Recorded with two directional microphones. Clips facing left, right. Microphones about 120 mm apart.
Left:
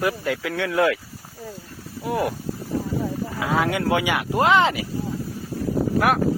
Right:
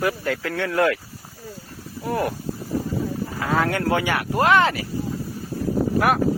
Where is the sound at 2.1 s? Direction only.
10° left (ahead or behind).